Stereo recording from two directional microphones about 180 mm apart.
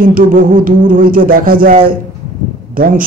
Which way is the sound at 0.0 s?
50° right (ahead or behind).